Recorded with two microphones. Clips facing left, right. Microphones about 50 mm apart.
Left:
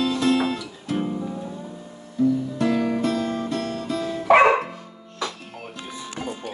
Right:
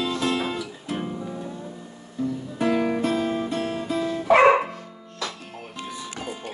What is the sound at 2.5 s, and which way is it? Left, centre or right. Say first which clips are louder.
Music: even; centre.